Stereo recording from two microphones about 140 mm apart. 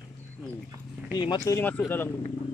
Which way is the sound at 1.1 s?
30° left (ahead or behind).